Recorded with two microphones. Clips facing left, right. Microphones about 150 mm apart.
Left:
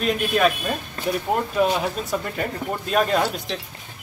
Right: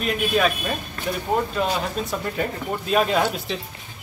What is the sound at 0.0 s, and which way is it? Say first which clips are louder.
Speech: left 1 dB; centre (ahead or behind).